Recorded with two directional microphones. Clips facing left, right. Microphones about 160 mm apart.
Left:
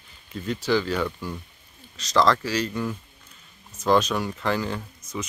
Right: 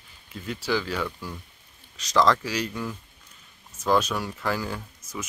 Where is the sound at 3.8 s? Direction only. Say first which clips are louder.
Left 3 dB; 5° right (ahead or behind).